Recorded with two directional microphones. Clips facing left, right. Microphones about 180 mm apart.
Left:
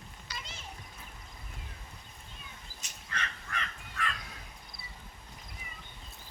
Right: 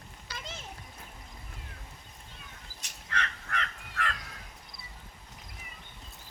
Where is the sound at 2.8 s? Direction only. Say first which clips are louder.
Right 4 dB; 70° right (ahead or behind).